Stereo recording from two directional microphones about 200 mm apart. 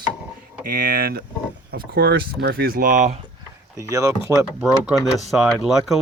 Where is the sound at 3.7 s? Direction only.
15° right (ahead or behind).